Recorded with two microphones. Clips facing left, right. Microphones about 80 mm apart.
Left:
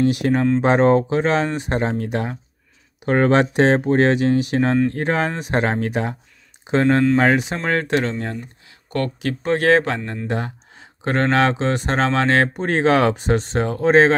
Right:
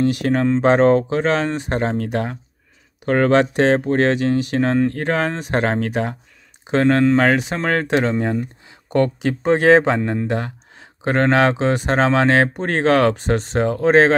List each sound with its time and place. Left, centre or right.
0.1 s speech: centre
3.1 s speech: centre
7.8 s speech: centre
10.2 s speech: centre
12.6 s speech: centre
13.4 s speech: centre